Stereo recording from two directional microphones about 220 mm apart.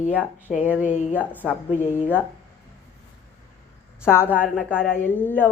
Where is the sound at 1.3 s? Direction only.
10° left (ahead or behind).